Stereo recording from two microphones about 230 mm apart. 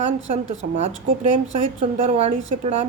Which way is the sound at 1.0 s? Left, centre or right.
Right.